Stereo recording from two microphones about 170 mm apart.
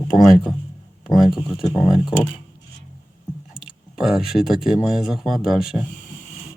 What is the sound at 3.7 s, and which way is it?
Speech, centre (ahead or behind).